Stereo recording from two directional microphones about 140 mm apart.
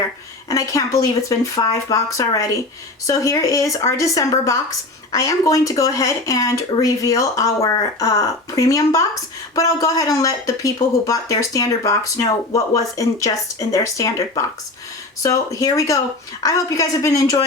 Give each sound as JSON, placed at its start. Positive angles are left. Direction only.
{"t": 0.4, "sound": "speech", "side_deg": 25}